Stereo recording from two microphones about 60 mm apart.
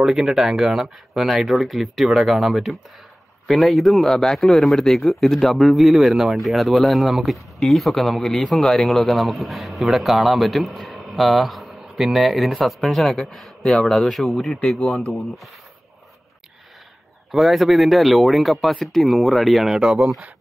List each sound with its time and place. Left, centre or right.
0.0 s a man's voice: centre
13.7 s speech: centre
13.9 s a man's voice: centre
17.3 s a man's voice: centre